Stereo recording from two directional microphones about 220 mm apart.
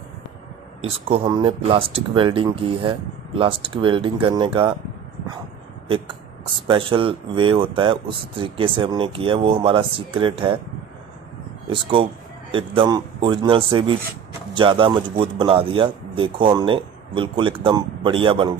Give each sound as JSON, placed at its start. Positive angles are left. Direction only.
{"t": 0.7, "sound": "speech", "side_deg": -25}
{"t": 6.7, "sound": "speech", "side_deg": -25}
{"t": 11.7, "sound": "speech", "side_deg": -25}